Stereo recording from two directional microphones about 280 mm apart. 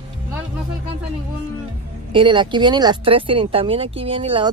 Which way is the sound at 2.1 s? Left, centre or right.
Centre.